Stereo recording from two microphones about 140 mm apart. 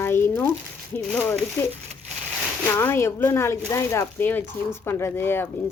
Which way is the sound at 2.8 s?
20° left (ahead or behind).